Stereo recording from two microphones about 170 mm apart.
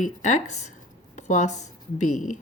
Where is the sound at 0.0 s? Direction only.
45° left (ahead or behind).